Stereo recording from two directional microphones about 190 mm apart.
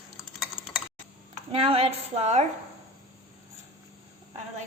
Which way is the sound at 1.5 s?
30° right (ahead or behind).